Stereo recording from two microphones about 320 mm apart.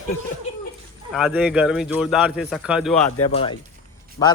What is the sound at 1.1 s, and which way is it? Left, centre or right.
A man's voice, centre.